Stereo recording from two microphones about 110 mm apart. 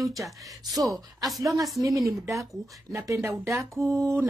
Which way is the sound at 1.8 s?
30° right (ahead or behind).